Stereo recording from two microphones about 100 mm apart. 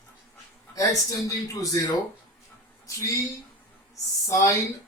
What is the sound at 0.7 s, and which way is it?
A man's voice, 35° left (ahead or behind).